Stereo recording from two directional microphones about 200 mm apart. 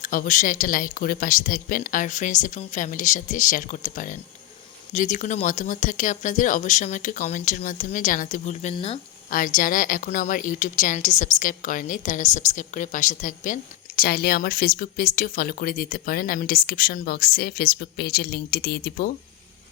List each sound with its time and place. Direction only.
0.0 s speech: 40° left (ahead or behind)
9.3 s a woman's voice: 45° left (ahead or behind)